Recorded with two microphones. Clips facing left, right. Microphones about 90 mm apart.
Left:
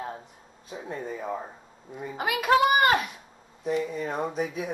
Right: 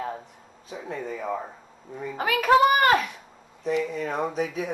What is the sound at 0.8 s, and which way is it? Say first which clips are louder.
Speech: right 2 dB; 30° left (ahead or behind).